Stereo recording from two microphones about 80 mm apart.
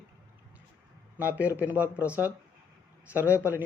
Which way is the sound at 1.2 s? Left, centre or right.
Right.